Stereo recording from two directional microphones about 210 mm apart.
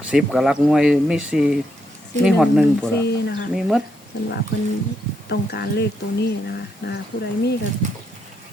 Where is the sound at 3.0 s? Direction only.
50° left (ahead or behind).